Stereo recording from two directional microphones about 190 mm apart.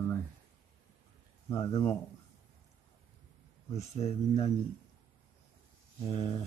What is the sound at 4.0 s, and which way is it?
Speech, 35° left (ahead or behind).